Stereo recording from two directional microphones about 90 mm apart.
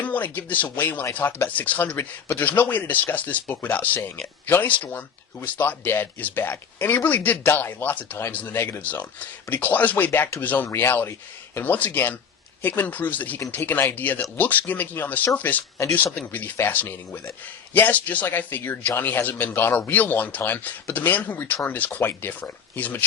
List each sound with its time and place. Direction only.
0.0 s speech: 20° left (ahead or behind)